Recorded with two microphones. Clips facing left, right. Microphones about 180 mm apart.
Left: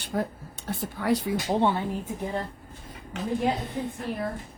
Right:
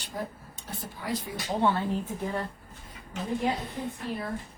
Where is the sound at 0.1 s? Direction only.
65° left (ahead or behind).